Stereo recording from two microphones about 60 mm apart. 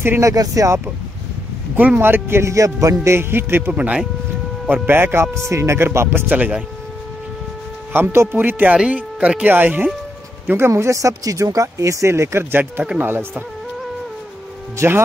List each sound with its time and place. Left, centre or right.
0.2 s speech: right
2.0 s a man's voice: right
3.7 s speech: right
4.8 s a man's voice: right
5.9 s speech: right
7.9 s speech: right
10.7 s speech: right
14.8 s a man's voice: right